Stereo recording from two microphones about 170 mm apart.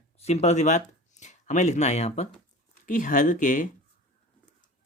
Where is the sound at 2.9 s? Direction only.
50° left (ahead or behind).